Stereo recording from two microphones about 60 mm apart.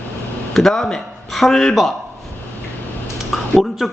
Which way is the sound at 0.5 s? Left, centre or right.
Centre.